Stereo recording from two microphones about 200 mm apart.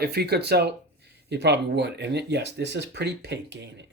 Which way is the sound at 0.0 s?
50° right (ahead or behind).